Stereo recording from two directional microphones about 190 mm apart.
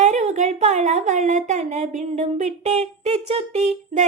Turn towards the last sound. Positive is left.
turn(degrees=-35)  # may be behind; listen again after turning